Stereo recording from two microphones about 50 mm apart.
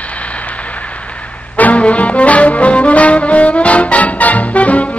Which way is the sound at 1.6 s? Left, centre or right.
Left.